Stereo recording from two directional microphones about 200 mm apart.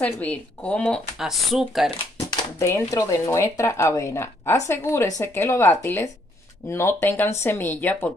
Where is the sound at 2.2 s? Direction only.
15° left (ahead or behind).